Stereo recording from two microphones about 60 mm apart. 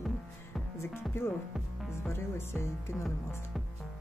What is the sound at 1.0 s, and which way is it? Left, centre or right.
Speech, left.